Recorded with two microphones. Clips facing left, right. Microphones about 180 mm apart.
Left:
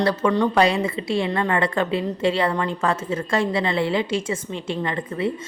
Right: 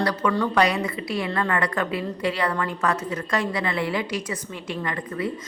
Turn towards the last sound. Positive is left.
turn(degrees=25)  # may be behind; listen again after turning